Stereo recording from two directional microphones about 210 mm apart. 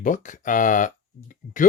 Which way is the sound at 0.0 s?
40° left (ahead or behind).